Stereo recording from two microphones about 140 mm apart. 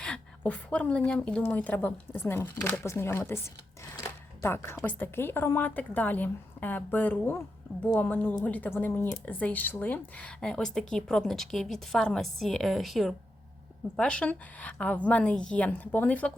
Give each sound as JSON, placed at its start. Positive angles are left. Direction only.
{"t": 0.0, "sound": "a woman's voice", "side_deg": 10}
{"t": 3.9, "sound": "a sound", "side_deg": 20}
{"t": 4.8, "sound": "a woman's voice", "side_deg": 10}